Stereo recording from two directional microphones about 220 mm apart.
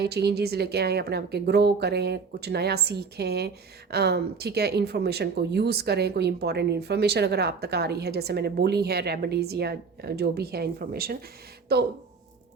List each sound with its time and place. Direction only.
0.0 s speech: 50° right (ahead or behind)